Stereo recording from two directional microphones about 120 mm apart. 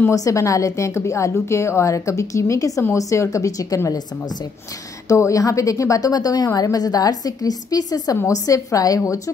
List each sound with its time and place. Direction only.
0.1 s a woman's voice: 25° left (ahead or behind)
5.0 s a woman's voice: 25° left (ahead or behind)